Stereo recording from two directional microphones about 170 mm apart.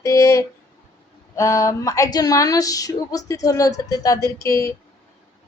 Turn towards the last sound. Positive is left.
turn(degrees=15)  # may be behind; listen again after turning